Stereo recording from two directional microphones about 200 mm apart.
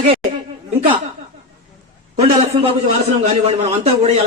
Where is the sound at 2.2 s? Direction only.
30° right (ahead or behind).